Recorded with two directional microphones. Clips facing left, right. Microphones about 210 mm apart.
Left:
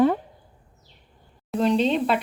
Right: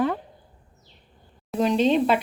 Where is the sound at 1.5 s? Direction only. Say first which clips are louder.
Right 1 dB; centre (ahead or behind).